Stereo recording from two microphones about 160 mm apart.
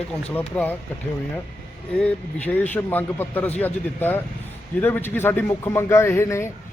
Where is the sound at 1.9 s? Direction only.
10° left (ahead or behind).